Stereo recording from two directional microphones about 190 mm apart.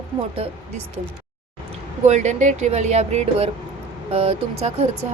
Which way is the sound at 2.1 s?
40° right (ahead or behind).